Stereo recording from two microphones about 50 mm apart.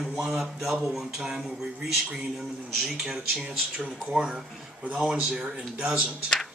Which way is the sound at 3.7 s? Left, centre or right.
Right.